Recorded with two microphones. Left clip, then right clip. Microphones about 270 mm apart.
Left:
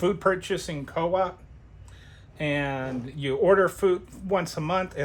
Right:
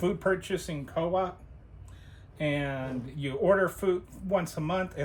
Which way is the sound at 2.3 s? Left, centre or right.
Left.